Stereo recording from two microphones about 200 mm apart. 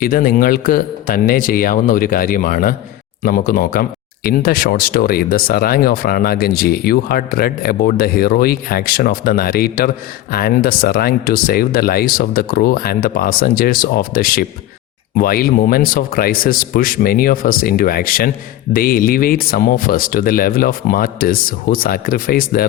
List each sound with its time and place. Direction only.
0.0 s speech: 45° left (ahead or behind)